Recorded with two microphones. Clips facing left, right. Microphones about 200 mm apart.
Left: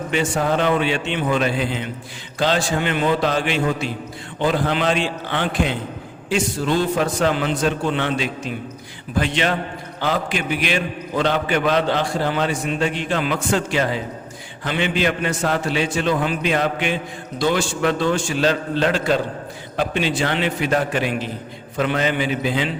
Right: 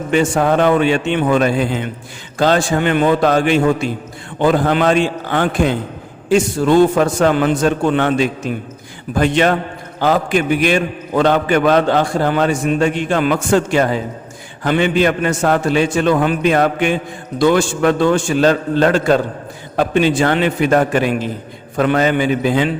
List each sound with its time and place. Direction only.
0.1 s a man's voice: 50° right (ahead or behind)